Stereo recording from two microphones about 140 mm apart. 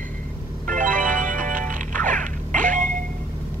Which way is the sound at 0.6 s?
70° right (ahead or behind).